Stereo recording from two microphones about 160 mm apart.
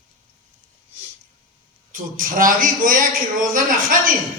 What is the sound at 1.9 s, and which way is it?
A man's voice, 60° right (ahead or behind).